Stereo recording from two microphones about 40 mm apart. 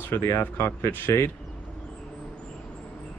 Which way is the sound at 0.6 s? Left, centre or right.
Left.